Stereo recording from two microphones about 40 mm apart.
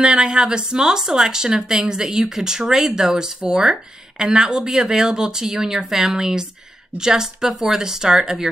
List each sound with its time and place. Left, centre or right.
0.0 s speech: right